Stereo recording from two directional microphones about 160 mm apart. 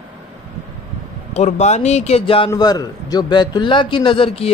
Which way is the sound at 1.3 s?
45° left (ahead or behind).